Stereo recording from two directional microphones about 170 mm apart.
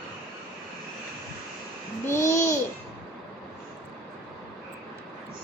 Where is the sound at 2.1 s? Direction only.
15° left (ahead or behind).